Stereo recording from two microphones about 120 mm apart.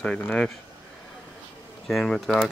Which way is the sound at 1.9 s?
Centre (ahead or behind).